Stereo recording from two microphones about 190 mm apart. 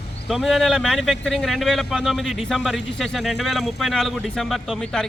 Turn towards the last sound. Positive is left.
turn(degrees=0)  # may be behind; listen again after turning